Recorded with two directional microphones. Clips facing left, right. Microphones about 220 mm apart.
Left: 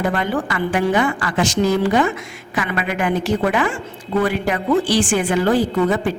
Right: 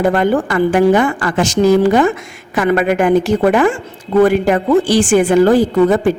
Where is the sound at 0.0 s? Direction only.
45° right (ahead or behind).